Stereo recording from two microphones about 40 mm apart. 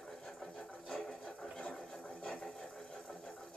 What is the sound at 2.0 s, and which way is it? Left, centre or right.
Sewing machine, left.